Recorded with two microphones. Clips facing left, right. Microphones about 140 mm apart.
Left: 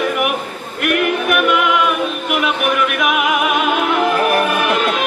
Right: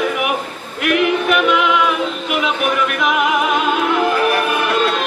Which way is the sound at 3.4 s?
65° left (ahead or behind).